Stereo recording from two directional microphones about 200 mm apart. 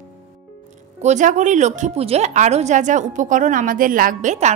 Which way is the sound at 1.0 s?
35° right (ahead or behind).